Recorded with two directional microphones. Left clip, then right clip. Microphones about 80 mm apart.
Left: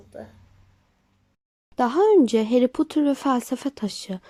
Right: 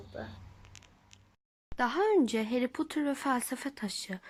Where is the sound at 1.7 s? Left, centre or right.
Left.